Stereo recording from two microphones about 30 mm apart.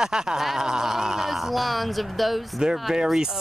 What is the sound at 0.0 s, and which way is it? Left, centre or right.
Speech, right.